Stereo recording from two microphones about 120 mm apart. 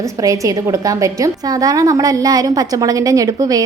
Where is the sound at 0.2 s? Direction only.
30° right (ahead or behind).